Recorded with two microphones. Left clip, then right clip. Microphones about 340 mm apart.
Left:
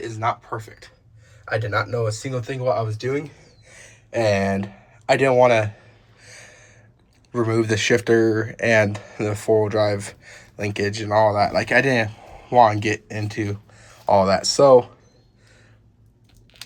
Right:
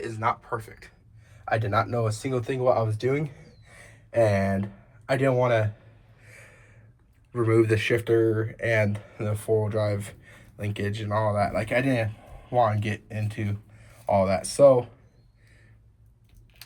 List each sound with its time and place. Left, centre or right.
0.0 s speech: centre
7.3 s speech: centre
9.6 s speech: centre